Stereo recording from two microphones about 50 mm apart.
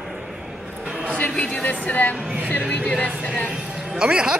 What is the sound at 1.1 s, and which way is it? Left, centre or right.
A woman's voice, left.